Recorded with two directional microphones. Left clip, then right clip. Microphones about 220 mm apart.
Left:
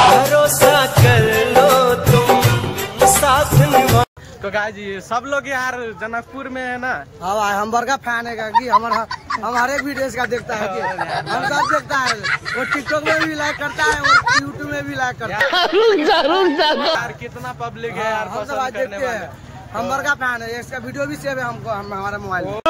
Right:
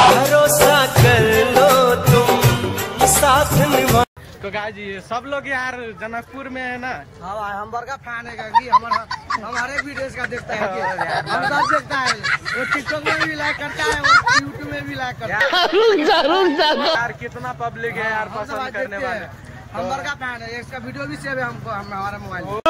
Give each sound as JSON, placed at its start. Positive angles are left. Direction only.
{"t": 0.0, "sound": "music", "side_deg": 0}
{"t": 5.1, "sound": "a man's voice", "side_deg": 10}
{"t": 8.7, "sound": "speech", "side_deg": 0}
{"t": 9.8, "sound": "speech", "side_deg": 25}
{"t": 10.2, "sound": "speech", "side_deg": 0}
{"t": 14.7, "sound": "a man's voice", "side_deg": 15}
{"t": 15.3, "sound": "a man's voice", "side_deg": 0}
{"t": 19.9, "sound": "a man's voice", "side_deg": 20}